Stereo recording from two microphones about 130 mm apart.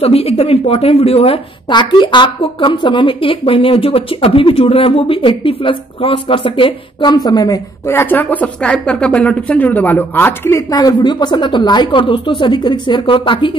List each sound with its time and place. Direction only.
0.0 s a woman's voice: 50° left (ahead or behind)
1.7 s a woman's voice: 35° left (ahead or behind); by 10.6 s 15° left (ahead or behind)
10.7 s speech: 30° left (ahead or behind)